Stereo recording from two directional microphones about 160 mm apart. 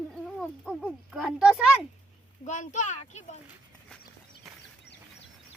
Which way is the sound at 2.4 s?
50° left (ahead or behind).